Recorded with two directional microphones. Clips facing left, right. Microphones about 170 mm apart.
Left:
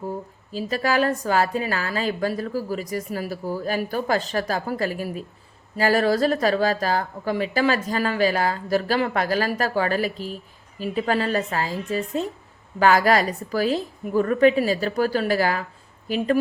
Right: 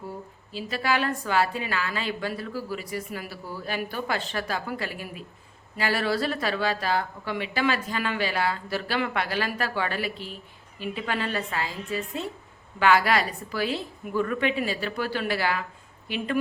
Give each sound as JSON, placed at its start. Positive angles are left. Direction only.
{"t": 0.5, "sound": "a woman's voice", "side_deg": 40}